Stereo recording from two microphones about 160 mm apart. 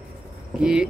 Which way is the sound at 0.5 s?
5° right (ahead or behind).